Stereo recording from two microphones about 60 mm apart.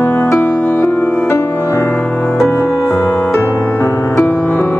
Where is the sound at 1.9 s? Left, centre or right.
Left.